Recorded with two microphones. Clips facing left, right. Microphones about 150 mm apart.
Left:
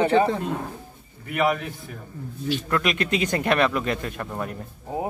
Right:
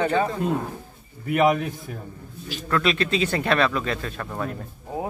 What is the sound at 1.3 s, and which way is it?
Speech, 40° right (ahead or behind).